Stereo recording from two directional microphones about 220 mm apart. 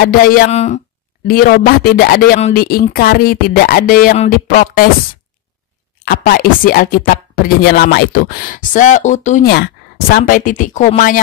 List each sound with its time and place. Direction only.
0.0 s speech: 40° left (ahead or behind)
1.2 s speech: 40° left (ahead or behind)
6.0 s speech: 40° left (ahead or behind)
9.5 s speech: 45° left (ahead or behind)